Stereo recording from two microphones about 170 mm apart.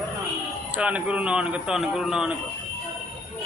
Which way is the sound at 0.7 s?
5° right (ahead or behind).